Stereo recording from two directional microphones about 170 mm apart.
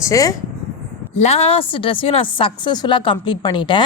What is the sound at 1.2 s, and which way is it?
A woman's voice, 35° left (ahead or behind).